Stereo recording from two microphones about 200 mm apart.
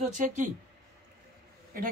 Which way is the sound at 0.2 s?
40° right (ahead or behind).